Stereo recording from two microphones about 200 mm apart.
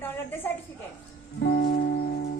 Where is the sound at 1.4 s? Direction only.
65° left (ahead or behind).